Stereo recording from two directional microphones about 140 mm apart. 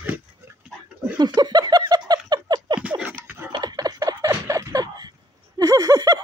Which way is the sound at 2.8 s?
10° right (ahead or behind).